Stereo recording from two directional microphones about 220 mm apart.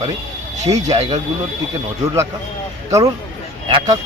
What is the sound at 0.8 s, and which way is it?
Speech, 30° right (ahead or behind).